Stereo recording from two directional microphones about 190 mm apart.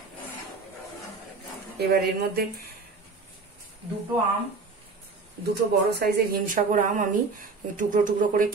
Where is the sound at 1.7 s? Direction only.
55° right (ahead or behind).